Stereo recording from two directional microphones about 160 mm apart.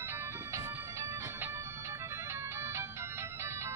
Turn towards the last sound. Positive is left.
turn(degrees=-15)  # may be behind; listen again after turning